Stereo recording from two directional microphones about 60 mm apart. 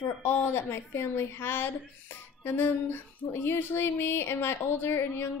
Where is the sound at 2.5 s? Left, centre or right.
Left.